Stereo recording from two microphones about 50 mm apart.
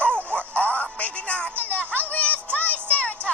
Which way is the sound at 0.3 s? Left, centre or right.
Left.